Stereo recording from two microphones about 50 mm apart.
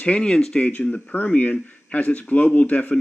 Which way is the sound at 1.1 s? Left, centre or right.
Left.